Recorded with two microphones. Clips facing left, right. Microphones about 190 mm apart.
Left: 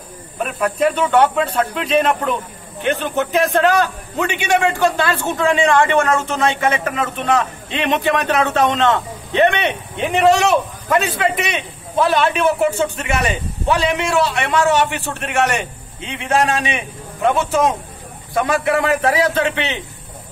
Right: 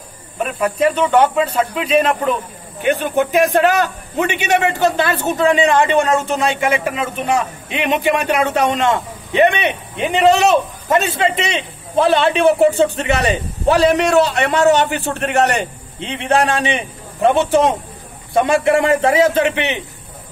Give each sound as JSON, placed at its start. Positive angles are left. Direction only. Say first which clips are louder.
{"t": 0.4, "sound": "a man's voice", "louder": "right 1 dB", "side_deg": 0}